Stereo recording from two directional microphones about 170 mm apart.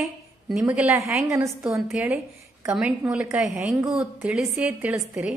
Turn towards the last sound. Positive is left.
turn(degrees=-5)  # may be behind; listen again after turning